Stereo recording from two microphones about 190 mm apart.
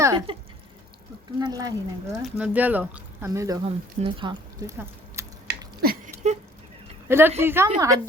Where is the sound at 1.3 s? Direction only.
20° right (ahead or behind).